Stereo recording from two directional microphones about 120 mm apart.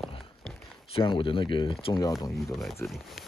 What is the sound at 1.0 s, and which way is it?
Speech, 45° left (ahead or behind).